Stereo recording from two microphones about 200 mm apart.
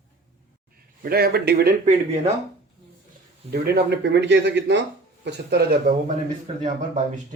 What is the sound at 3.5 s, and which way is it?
Speech, 55° right (ahead or behind).